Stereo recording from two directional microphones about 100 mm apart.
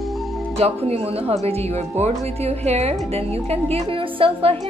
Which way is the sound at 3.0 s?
90° right.